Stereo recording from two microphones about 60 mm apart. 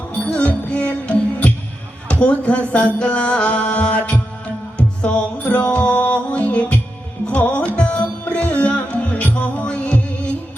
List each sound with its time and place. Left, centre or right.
0.3 s music: left